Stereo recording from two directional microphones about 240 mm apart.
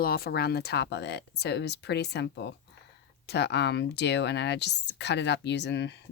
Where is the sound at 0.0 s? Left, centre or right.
Left.